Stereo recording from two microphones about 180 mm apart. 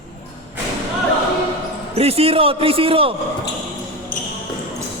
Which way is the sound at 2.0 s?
35° right (ahead or behind).